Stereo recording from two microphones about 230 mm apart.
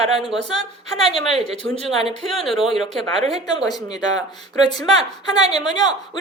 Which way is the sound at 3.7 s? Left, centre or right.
Centre.